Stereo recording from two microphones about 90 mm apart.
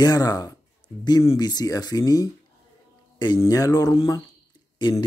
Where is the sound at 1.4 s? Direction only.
50° left (ahead or behind).